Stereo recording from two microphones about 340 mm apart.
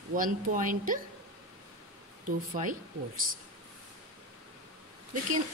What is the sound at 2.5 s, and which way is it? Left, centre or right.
Speech, right.